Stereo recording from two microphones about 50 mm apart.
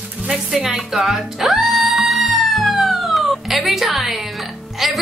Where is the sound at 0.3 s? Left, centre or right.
Centre.